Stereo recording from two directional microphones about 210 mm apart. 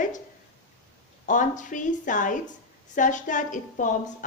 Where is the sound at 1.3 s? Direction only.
35° left (ahead or behind).